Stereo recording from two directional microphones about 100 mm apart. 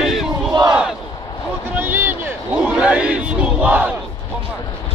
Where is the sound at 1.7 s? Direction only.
20° right (ahead or behind).